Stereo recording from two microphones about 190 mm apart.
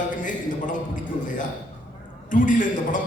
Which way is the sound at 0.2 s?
45° left (ahead or behind).